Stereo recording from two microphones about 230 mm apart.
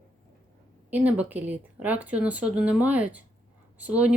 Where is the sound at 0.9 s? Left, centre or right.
Centre.